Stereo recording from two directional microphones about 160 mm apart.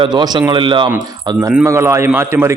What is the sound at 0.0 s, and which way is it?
A man's voice, 25° right (ahead or behind).